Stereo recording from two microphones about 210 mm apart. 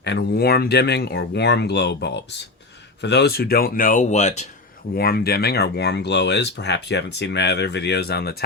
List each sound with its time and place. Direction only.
0.0 s speech: 55° left (ahead or behind); by 4.4 s 35° left (ahead or behind)
4.9 s speech: 45° left (ahead or behind)